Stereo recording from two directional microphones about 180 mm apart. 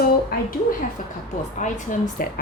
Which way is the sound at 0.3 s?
55° left (ahead or behind).